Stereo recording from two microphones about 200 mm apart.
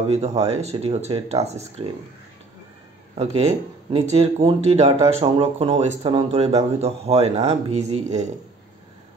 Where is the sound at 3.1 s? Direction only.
30° right (ahead or behind).